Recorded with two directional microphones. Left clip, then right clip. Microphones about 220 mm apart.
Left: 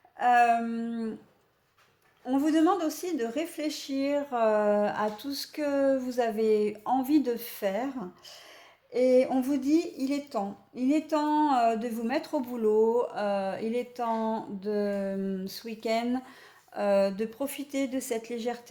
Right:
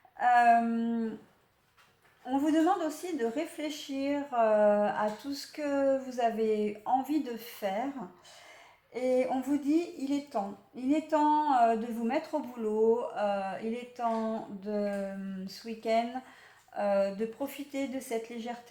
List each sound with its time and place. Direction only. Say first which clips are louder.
0.2 s a woman's voice: left 1 dB; 45° left (ahead or behind)
2.2 s a woman's voice: left 2 dB; 45° left (ahead or behind)
8.9 s a woman's voice: left 6 dB; 45° left (ahead or behind)